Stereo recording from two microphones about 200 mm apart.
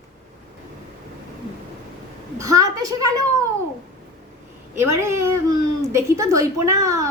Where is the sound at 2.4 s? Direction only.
15° right (ahead or behind).